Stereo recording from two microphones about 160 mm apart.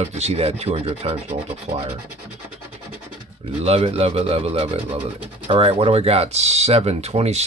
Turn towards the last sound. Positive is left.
turn(degrees=-40)  # may be behind; listen again after turning